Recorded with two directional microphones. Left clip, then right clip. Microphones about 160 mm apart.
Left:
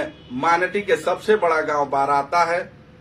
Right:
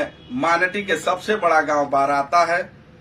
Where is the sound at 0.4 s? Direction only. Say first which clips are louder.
Even; 15° left (ahead or behind).